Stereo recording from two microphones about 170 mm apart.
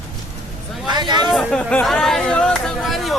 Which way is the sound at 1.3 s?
5° left (ahead or behind).